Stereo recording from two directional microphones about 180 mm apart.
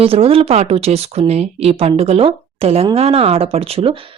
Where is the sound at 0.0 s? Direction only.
30° right (ahead or behind).